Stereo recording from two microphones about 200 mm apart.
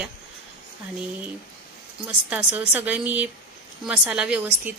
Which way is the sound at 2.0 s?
5° right (ahead or behind).